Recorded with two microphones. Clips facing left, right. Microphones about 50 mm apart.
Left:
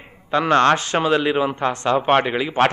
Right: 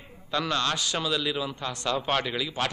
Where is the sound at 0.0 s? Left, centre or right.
Left.